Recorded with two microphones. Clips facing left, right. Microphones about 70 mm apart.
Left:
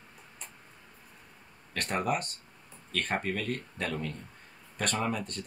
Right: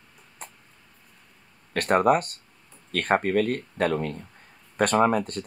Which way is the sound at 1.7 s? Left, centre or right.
Right.